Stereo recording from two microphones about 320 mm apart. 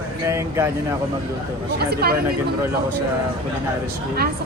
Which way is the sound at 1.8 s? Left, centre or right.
Right.